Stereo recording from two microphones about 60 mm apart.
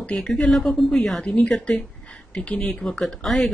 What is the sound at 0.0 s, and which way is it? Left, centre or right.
Speech, centre.